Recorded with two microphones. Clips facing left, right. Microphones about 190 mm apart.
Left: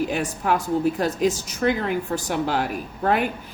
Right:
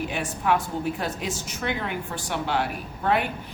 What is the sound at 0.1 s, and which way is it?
A woman's voice, 40° left (ahead or behind).